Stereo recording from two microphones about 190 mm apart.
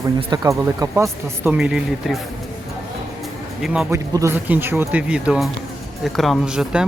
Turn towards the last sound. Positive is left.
turn(degrees=-5)  # may be behind; listen again after turning